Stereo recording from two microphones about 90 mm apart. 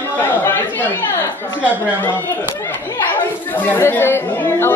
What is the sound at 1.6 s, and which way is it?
A woman's voice, 20° left (ahead or behind).